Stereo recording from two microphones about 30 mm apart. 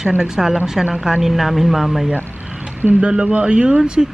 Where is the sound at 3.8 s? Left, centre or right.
Right.